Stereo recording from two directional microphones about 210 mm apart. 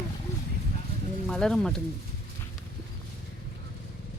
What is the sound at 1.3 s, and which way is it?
Speech, 5° left (ahead or behind).